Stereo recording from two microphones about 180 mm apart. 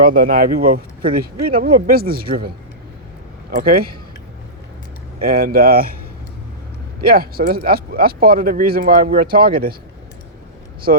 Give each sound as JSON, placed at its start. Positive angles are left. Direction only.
{"t": 0.1, "sound": "speech", "side_deg": -50}
{"t": 3.5, "sound": "speech", "side_deg": -55}
{"t": 5.2, "sound": "speech", "side_deg": -55}
{"t": 7.0, "sound": "speech", "side_deg": -55}